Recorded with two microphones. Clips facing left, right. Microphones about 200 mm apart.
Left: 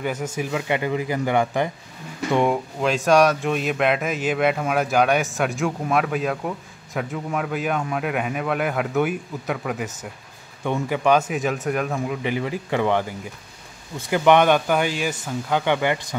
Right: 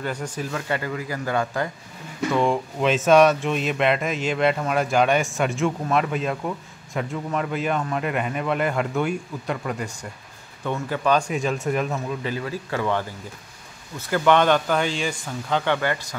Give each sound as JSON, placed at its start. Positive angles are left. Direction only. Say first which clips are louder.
{"t": 0.0, "sound": "speech", "louder": "left 3 dB", "side_deg": 5}
{"t": 2.4, "sound": "speech", "louder": "even", "side_deg": 0}
{"t": 11.9, "sound": "speech", "louder": "left 3 dB", "side_deg": 15}